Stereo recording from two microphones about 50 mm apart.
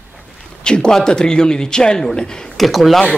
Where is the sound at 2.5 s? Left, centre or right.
Centre.